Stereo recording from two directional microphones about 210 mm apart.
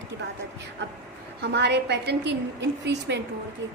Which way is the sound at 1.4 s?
55° right (ahead or behind).